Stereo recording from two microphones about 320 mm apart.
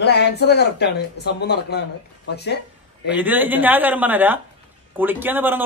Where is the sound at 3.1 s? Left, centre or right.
Centre.